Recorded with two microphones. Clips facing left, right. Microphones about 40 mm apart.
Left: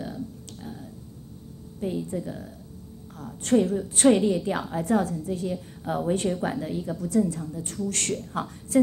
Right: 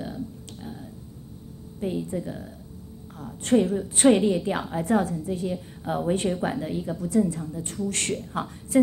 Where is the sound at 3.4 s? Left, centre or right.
Right.